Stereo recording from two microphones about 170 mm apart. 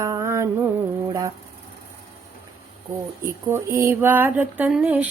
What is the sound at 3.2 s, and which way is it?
Speech, 15° right (ahead or behind).